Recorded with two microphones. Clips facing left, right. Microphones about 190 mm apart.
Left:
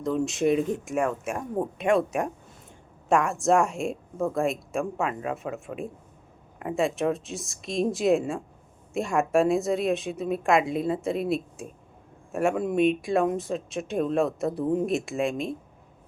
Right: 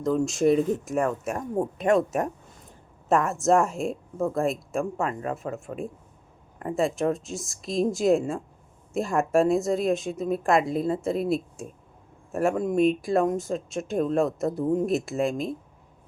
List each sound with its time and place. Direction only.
0.0 s a woman's voice: centre (ahead or behind)
3.1 s a woman's voice: centre (ahead or behind)